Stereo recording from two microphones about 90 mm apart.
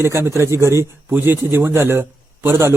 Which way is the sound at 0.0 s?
30° right (ahead or behind).